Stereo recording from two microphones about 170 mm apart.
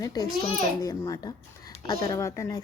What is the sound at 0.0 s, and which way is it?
A woman's voice, 20° left (ahead or behind).